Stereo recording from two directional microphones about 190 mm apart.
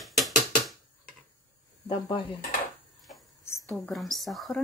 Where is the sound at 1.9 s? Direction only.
25° left (ahead or behind).